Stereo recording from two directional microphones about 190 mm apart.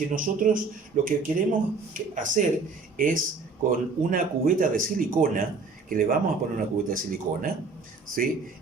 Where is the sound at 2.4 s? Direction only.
40° right (ahead or behind).